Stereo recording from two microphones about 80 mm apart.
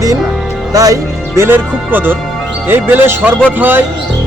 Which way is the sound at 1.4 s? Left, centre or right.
Right.